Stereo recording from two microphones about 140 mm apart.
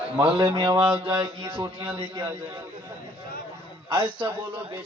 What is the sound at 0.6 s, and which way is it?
Speech, 35° right (ahead or behind).